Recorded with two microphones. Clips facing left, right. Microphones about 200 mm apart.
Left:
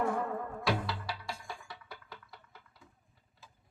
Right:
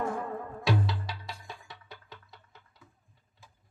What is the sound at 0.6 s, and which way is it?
Music, 20° right (ahead or behind).